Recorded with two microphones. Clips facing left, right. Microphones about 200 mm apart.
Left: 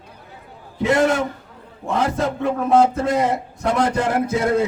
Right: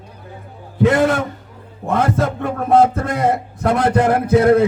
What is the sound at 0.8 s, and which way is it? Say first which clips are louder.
A man's voice: right 3 dB; 60° right (ahead or behind).